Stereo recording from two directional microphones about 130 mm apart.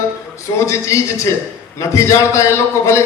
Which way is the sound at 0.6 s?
20° left (ahead or behind).